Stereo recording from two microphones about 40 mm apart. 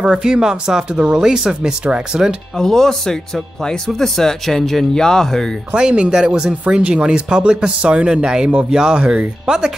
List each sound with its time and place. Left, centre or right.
0.0 s speech: right
2.5 s speech: centre
5.8 s speech: right